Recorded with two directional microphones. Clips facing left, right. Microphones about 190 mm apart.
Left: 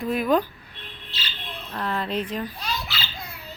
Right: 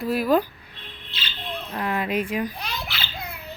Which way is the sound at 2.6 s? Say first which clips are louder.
Left 1 dB; 60° right (ahead or behind).